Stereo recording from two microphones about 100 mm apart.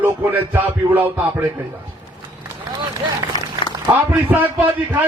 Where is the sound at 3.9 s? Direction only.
20° right (ahead or behind).